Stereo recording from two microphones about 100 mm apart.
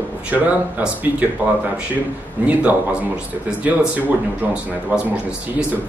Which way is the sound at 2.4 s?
15° right (ahead or behind).